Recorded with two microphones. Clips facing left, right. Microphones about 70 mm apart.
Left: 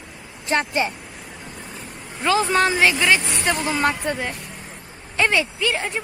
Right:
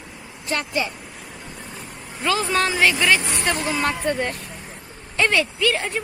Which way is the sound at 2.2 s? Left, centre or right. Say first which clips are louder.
Left 3 dB; left.